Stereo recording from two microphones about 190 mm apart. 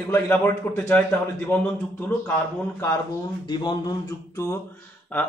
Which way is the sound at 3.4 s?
25° left (ahead or behind).